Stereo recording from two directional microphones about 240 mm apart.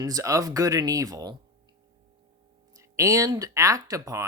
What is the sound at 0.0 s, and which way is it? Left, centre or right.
Speech, centre.